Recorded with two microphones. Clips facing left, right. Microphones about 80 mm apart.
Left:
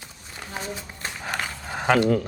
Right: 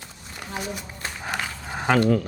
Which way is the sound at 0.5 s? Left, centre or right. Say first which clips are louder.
Right 1 dB; left.